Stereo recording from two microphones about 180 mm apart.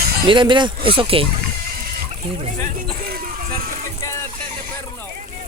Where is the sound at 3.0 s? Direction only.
55° right (ahead or behind).